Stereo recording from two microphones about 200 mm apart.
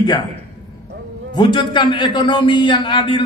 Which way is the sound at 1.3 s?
20° left (ahead or behind).